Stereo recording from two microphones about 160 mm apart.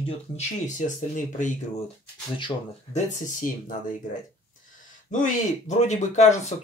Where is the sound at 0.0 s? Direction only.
45° left (ahead or behind).